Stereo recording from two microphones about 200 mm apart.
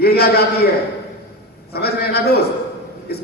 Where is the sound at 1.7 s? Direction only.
50° left (ahead or behind).